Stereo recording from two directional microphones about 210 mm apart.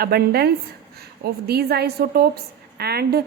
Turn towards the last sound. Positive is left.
turn(degrees=-50)  # may be behind; listen again after turning